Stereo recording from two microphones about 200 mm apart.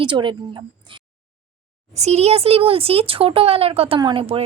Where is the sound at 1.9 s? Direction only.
35° right (ahead or behind).